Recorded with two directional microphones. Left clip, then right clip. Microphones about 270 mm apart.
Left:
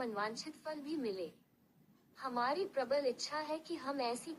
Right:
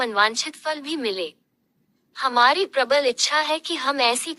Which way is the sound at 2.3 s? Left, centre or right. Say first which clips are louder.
Right 18 dB; right.